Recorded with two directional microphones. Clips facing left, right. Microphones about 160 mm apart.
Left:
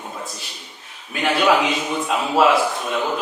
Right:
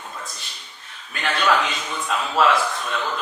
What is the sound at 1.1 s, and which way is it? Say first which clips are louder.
Speech: left 4 dB; 10° left (ahead or behind).